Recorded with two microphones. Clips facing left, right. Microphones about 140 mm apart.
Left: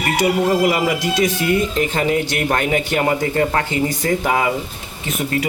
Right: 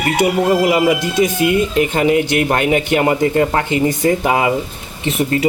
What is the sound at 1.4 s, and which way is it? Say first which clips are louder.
Speech: right 3 dB; 15° right (ahead or behind).